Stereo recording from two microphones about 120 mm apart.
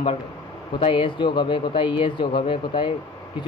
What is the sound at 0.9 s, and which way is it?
Speech, 45° left (ahead or behind).